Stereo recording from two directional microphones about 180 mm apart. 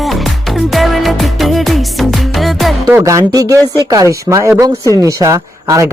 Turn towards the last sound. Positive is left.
turn(degrees=-20)  # may be behind; listen again after turning